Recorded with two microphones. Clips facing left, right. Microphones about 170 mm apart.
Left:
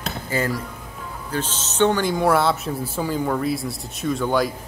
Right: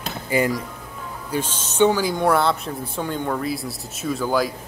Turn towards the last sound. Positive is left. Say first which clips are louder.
# left 1 dB
turn(degrees=0)  # may be behind; listen again after turning